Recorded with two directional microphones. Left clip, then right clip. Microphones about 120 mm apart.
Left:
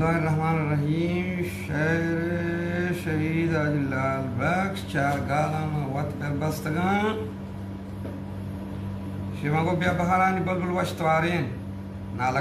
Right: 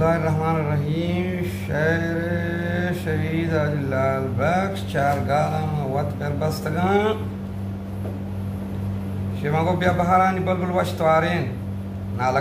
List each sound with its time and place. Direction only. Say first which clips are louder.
0.0 s mantra: right 4 dB; 15° right (ahead or behind)
9.4 s a man's voice: right 4 dB; 20° right (ahead or behind)